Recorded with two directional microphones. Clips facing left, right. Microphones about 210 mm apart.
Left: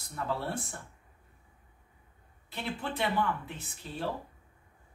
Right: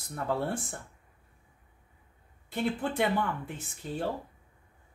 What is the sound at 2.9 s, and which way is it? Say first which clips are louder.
Speech: right 2 dB; 50° right (ahead or behind).